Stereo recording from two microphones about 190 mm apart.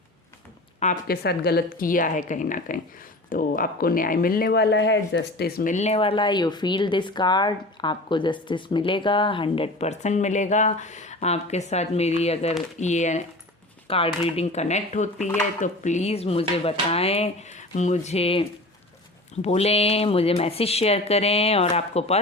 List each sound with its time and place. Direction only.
1.0 s speech: 55° left (ahead or behind); by 22.2 s 35° left (ahead or behind)